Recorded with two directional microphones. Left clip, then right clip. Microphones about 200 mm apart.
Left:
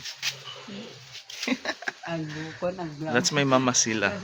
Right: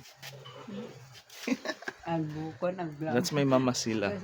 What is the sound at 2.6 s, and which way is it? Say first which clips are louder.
Speech: left 2 dB; 30° left (ahead or behind).